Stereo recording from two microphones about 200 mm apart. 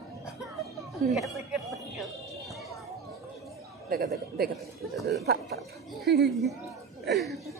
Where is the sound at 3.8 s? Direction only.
50° right (ahead or behind).